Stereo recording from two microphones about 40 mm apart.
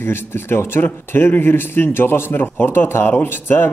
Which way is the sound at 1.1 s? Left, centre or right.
Left.